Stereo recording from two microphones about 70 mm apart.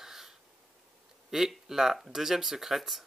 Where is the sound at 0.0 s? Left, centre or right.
Centre.